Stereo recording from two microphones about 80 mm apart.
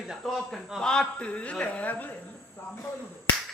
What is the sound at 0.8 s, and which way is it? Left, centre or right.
A man's voice, centre.